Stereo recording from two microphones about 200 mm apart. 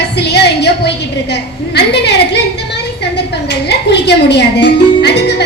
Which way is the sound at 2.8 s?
55° left (ahead or behind).